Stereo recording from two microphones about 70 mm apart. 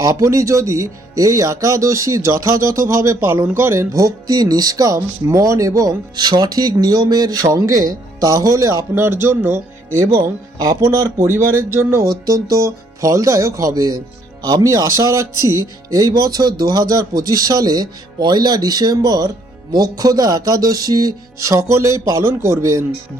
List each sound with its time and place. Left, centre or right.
0.0 s speech: right
3.2 s speech: right
3.9 s speech: right
6.1 s speech: right
9.0 s speech: right
10.2 s speech: right
11.2 s speech: right
12.0 s speech: right
22.2 s speech: right